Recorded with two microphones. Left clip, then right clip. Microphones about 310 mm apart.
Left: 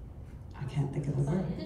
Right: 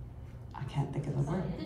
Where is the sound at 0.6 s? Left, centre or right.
Right.